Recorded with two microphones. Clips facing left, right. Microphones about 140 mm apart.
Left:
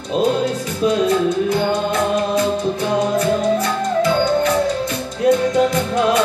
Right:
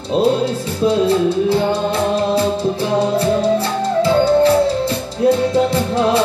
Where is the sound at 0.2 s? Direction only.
30° right (ahead or behind).